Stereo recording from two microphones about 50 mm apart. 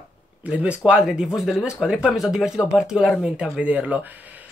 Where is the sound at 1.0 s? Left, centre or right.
Centre.